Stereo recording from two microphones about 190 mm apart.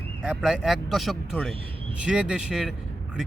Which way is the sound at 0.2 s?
5° right (ahead or behind).